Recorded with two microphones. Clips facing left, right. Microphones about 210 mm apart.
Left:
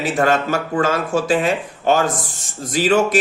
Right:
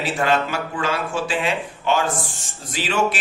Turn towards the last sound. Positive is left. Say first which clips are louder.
# left 7 dB
turn(degrees=40)  # may be behind; listen again after turning